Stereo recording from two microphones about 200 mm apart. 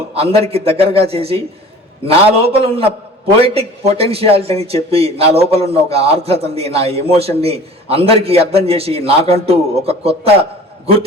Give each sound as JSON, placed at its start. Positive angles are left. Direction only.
{"t": 0.1, "sound": "speech", "side_deg": -30}